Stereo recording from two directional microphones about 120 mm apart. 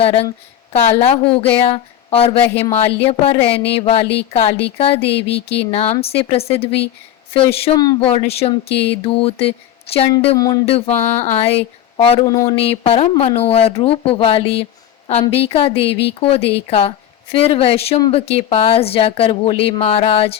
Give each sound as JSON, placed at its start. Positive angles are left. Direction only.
{"t": 0.0, "sound": "a woman's voice", "side_deg": 55}
{"t": 10.3, "sound": "speech", "side_deg": 30}
{"t": 10.7, "sound": "speech", "side_deg": 60}
{"t": 12.2, "sound": "speech", "side_deg": 30}
{"t": 12.8, "sound": "a woman's voice", "side_deg": 55}